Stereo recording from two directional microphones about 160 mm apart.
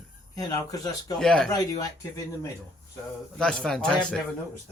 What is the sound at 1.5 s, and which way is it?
Speech, 20° left (ahead or behind).